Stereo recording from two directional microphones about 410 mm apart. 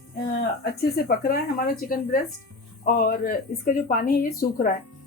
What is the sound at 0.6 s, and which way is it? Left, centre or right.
A woman's voice, left.